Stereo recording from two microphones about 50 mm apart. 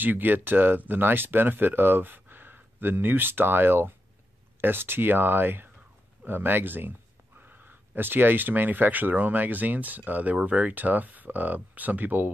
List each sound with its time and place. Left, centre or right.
0.0 s speech: right